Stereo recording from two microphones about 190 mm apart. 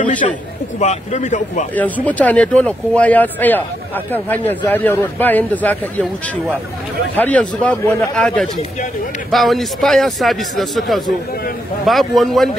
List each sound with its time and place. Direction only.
0.0 s a sound: 40° left (ahead or behind)
0.7 s speech: 40° left (ahead or behind)
1.8 s speech: 10° left (ahead or behind)
7.2 s a man's voice: 5° left (ahead or behind)